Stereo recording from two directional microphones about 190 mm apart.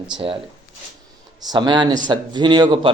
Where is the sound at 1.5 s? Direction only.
20° right (ahead or behind).